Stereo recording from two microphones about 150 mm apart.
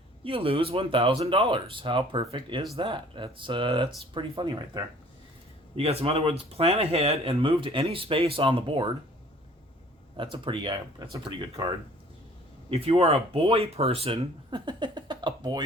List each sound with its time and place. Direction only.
0.3 s speech: 35° right (ahead or behind)
5.7 s speech: 40° right (ahead or behind)
10.3 s speech: 35° right (ahead or behind)
12.7 s speech: 40° right (ahead or behind)